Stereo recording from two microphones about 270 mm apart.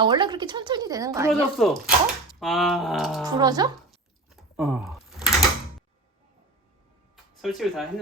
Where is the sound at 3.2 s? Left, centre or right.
Centre.